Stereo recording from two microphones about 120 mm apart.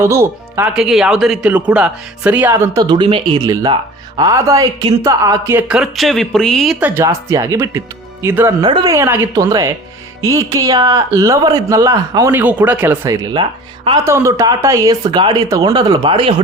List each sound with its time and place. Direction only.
0.0 s speech: 20° right (ahead or behind)
0.8 s speech: 5° right (ahead or behind)
2.5 s speech: 25° right (ahead or behind); by 3.4 s 45° right (ahead or behind)
3.4 s speech: 30° right (ahead or behind)
5.5 s speech: 5° right (ahead or behind)
6.7 s speech: 10° right (ahead or behind)
7.0 s speech: 25° right (ahead or behind)
8.6 s speech: 40° right (ahead or behind)
8.9 s speech: 20° right (ahead or behind)
9.3 s speech: 30° right (ahead or behind)
12.4 s speech: 15° right (ahead or behind)
13.1 s speech: 35° right (ahead or behind)
14.0 s speech: 25° right (ahead or behind)
15.7 s speech: 40° right (ahead or behind)